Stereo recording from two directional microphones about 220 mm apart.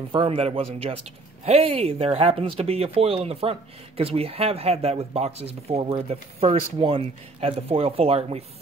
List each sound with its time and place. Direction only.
0.1 s speech: 25° right (ahead or behind)